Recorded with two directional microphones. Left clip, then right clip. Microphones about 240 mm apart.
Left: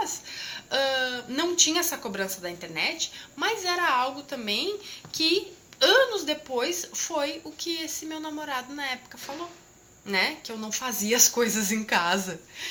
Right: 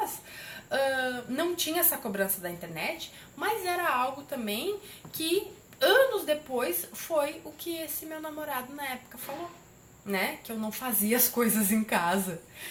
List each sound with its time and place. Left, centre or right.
0.0 s a woman's voice: centre
10.1 s a woman's voice: centre